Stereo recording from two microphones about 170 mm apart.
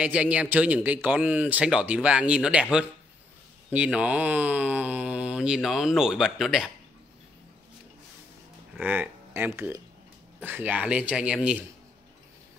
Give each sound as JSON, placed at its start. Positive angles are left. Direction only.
{"t": 0.0, "sound": "speech", "side_deg": -5}
{"t": 3.7, "sound": "speech", "side_deg": -10}
{"t": 8.7, "sound": "a man's voice", "side_deg": -10}